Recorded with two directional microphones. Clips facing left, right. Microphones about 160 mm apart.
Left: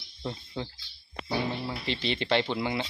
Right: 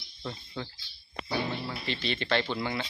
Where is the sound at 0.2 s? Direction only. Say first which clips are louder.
Left 3 dB; 20° left (ahead or behind).